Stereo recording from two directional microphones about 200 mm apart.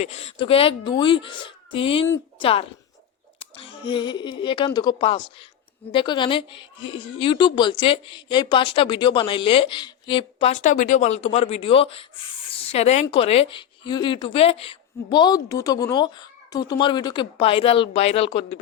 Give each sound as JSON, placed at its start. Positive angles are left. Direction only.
{"t": 0.0, "sound": "a woman's voice", "side_deg": 30}